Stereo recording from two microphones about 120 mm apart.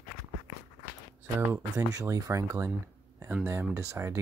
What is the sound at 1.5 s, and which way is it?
Speech, 25° right (ahead or behind).